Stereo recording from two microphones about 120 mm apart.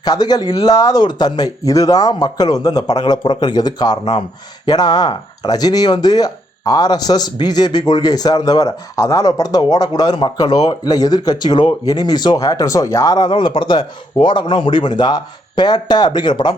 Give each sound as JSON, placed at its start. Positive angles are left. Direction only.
{"t": 0.0, "sound": "speech", "side_deg": 35}